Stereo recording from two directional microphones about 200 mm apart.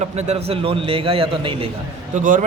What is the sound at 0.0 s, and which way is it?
A man's voice, 35° right (ahead or behind).